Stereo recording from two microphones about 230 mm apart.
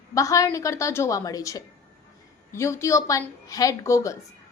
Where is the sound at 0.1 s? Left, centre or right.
Centre.